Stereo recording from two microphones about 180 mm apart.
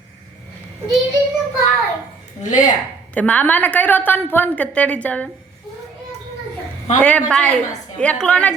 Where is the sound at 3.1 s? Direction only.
10° left (ahead or behind).